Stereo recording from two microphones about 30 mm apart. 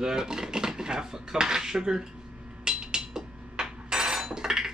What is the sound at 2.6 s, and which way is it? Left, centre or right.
Hammer, right.